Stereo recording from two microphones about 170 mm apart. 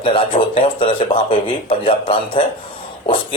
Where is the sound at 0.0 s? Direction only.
30° left (ahead or behind).